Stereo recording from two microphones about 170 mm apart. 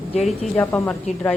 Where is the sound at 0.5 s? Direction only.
10° left (ahead or behind).